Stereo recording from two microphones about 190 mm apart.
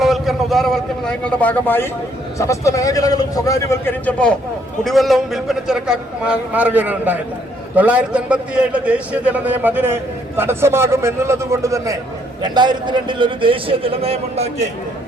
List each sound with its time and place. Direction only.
0.0 s a man's voice: centre (ahead or behind); by 14.7 s 35° right (ahead or behind)